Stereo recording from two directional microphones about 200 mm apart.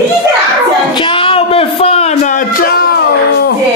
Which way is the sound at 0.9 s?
25° left (ahead or behind).